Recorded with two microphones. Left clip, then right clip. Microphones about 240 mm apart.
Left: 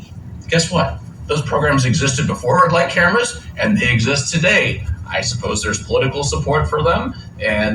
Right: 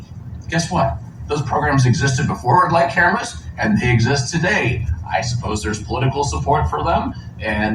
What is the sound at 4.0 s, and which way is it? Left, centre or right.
Speech, left.